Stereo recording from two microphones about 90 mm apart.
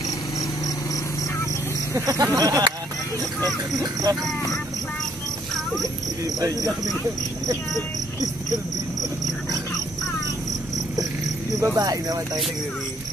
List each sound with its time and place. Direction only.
2.0 s speech: 40° right (ahead or behind)
5.8 s speech: 40° right (ahead or behind)
11.6 s speech: 40° right (ahead or behind)